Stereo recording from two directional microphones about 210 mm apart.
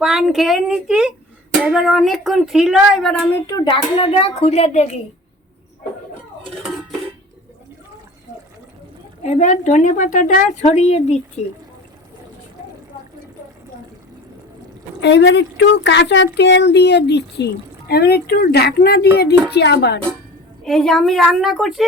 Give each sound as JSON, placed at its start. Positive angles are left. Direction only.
{"t": 0.0, "sound": "a woman's voice", "side_deg": 0}
{"t": 9.2, "sound": "a woman's voice", "side_deg": 35}
{"t": 15.0, "sound": "speech", "side_deg": 60}
{"t": 20.7, "sound": "a woman's voice", "side_deg": 0}